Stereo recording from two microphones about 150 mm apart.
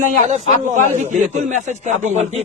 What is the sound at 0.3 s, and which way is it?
A man's voice, 50° right (ahead or behind).